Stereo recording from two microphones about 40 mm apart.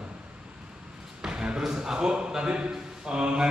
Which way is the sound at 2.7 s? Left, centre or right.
Right.